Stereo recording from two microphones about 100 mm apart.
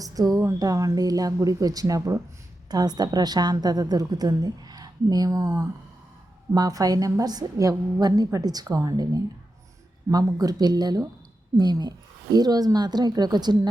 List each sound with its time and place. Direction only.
0.0 s a woman's voice: 35° right (ahead or behind)
2.6 s a woman's voice: 40° right (ahead or behind)